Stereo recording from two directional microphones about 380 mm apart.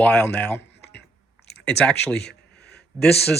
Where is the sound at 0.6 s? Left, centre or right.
Left.